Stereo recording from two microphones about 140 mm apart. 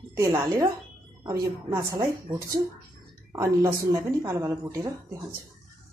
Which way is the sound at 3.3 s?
20° right (ahead or behind).